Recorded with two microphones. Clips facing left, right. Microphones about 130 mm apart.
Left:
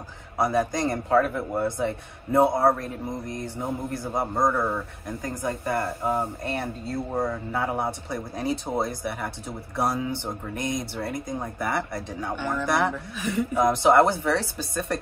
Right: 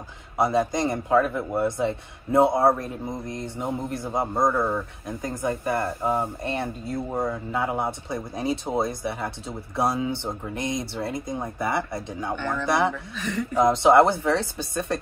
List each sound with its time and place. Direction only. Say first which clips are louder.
0.4 s speech: right 1 dB; 25° right (ahead or behind)
4.3 s speech: right 1 dB; centre (ahead or behind)
5.0 s speech: right 1 dB; 25° right (ahead or behind)
7.1 s speech: even; centre (ahead or behind)
7.5 s speech: right 1 dB; 20° right (ahead or behind)
12.4 s speech: left 2 dB; 10° left (ahead or behind)
12.6 s speech: right 2 dB; 20° right (ahead or behind)
13.1 s speech: left 2 dB; 10° left (ahead or behind)
13.6 s speech: right 2 dB; 25° right (ahead or behind)